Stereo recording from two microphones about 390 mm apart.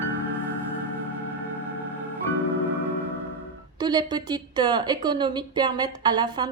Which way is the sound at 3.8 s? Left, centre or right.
Centre.